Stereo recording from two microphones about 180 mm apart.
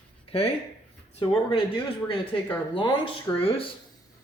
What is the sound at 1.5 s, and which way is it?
Speech, 30° left (ahead or behind).